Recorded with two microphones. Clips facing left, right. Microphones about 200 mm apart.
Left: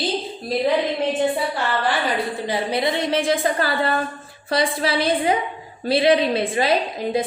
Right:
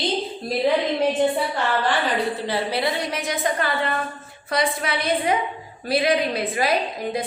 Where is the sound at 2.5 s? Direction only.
15° left (ahead or behind).